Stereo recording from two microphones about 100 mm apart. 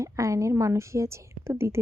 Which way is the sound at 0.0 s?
30° right (ahead or behind).